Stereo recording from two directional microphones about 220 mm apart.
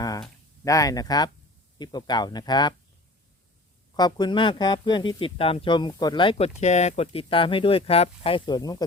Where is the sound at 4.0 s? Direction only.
20° left (ahead or behind).